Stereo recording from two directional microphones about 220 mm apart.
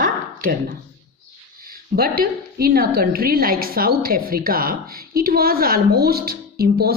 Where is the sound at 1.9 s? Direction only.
45° right (ahead or behind).